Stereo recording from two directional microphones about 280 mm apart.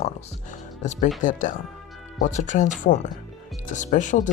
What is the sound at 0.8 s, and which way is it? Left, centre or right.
Speech, left.